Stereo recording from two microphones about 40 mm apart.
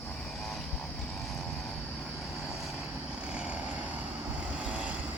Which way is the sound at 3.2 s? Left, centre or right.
Right.